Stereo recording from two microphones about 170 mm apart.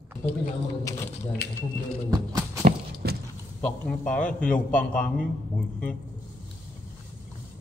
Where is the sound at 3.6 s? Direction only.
5° left (ahead or behind).